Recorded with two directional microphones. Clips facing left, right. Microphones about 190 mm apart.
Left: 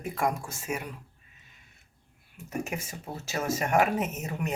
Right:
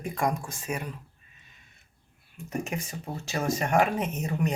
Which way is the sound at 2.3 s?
5° left (ahead or behind).